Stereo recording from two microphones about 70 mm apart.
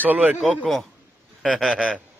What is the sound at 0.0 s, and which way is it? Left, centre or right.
Speech, right.